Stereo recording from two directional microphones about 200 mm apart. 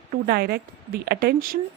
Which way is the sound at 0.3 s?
50° right (ahead or behind).